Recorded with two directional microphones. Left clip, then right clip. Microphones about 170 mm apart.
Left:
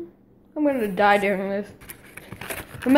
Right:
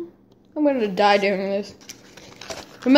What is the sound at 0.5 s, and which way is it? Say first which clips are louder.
A woman's voice: right 2 dB; 15° right (ahead or behind).